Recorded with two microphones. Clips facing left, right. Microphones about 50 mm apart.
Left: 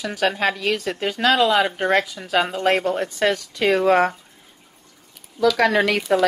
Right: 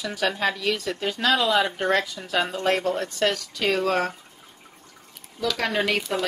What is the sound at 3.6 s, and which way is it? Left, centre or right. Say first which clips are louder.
Speech: left 7 dB; left.